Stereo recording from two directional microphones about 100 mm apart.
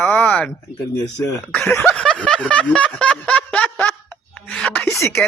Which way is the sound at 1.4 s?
15° left (ahead or behind).